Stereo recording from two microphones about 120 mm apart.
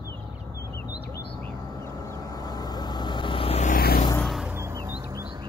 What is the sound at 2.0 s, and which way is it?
Vehicle, 30° left (ahead or behind).